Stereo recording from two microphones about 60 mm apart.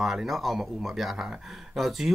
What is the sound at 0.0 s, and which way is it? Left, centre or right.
Speech, centre.